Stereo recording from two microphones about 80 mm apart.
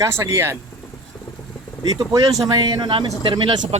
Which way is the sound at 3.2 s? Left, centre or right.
Right.